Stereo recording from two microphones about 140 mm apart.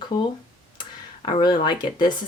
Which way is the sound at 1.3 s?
30° left (ahead or behind).